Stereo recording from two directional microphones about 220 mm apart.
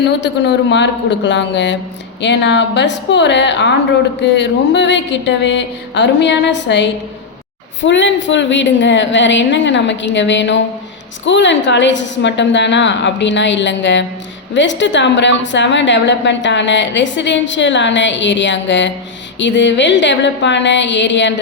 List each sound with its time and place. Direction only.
0.0 s a woman's voice: 55° left (ahead or behind)